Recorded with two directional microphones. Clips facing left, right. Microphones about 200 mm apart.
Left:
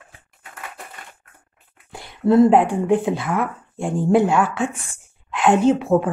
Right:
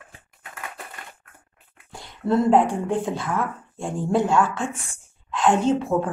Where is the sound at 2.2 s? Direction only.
10° left (ahead or behind).